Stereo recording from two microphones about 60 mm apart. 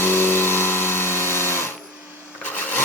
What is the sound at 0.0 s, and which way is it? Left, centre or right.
Music, left.